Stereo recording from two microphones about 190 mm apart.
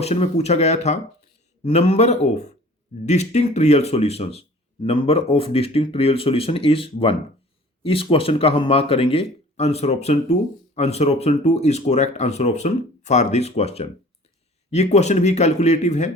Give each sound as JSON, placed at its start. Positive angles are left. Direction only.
{"t": 0.0, "sound": "speech", "side_deg": 35}